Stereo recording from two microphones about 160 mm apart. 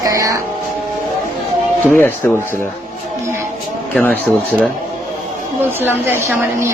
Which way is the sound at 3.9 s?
10° left (ahead or behind).